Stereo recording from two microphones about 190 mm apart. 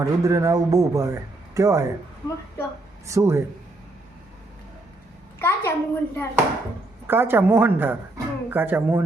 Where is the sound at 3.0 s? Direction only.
15° right (ahead or behind).